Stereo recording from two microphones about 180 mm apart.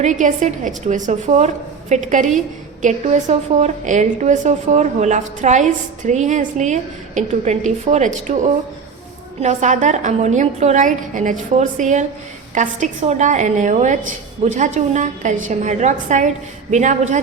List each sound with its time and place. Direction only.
0.0 s a woman's voice: 45° right (ahead or behind)
9.4 s a woman's voice: 45° right (ahead or behind)